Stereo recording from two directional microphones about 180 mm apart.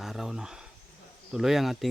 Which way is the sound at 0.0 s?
Centre (ahead or behind).